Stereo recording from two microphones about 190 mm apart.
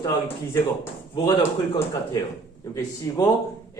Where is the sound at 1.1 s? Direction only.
20° left (ahead or behind).